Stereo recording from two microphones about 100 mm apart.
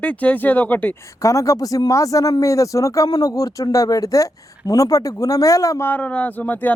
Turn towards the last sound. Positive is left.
turn(degrees=15)  # may be behind; listen again after turning